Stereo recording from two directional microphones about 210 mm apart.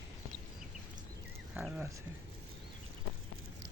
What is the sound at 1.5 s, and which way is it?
Speech, 5° right (ahead or behind).